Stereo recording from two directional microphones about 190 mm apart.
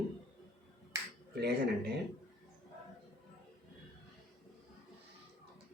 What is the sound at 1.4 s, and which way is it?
Speech, 60° right (ahead or behind).